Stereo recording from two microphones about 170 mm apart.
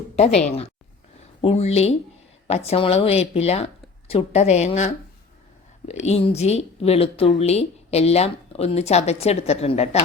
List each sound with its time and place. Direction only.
1.4 s speech: 35° left (ahead or behind)
5.9 s speech: 40° left (ahead or behind)